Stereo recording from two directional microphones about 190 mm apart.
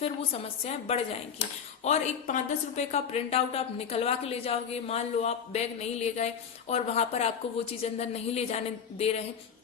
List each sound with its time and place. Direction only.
0.6 s a woman's voice: 30° left (ahead or behind)